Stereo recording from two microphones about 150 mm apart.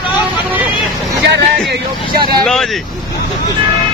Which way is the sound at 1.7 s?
90° right.